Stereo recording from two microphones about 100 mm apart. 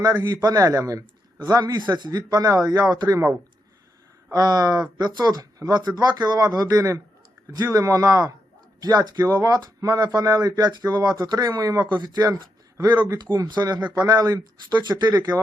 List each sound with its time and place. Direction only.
0.4 s a man's voice: 35° right (ahead or behind)
4.3 s a man's voice: 40° right (ahead or behind)
13.5 s a man's voice: 45° right (ahead or behind)